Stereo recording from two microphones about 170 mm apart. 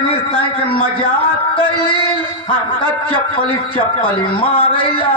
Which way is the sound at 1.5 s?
30° left (ahead or behind).